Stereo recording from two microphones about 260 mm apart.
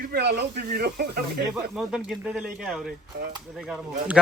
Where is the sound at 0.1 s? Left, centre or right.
Right.